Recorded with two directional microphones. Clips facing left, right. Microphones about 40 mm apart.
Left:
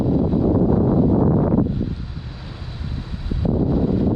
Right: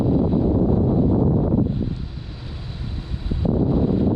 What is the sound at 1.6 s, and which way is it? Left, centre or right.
Vehicle, centre.